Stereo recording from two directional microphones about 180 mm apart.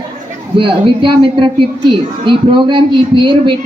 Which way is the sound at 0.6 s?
30° right (ahead or behind).